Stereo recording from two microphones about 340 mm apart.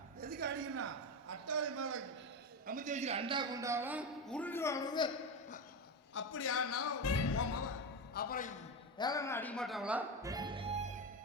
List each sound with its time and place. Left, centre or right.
0.2 s a sound: right
2.6 s a man's voice: right; by 5.5 s centre
6.1 s a man's voice: left
8.1 s a man's voice: left
9.0 s speech: centre